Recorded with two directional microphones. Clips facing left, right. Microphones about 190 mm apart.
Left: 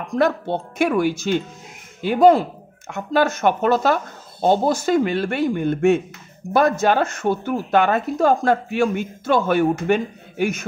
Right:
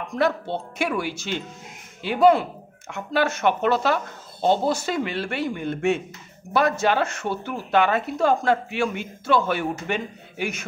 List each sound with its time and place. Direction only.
0.2 s speech: 45° left (ahead or behind)